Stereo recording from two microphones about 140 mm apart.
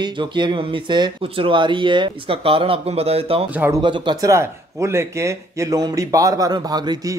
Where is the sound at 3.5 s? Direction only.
15° right (ahead or behind).